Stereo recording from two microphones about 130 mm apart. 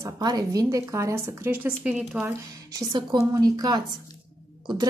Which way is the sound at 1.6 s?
10° right (ahead or behind).